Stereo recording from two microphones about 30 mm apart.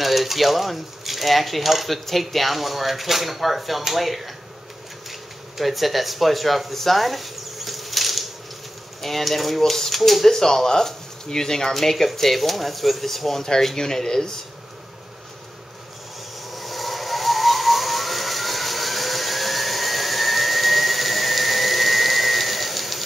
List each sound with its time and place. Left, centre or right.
0.0 s speech: centre
5.6 s speech: centre
10.2 s speech: centre
11.7 s speech: centre
16.4 s vehicle: centre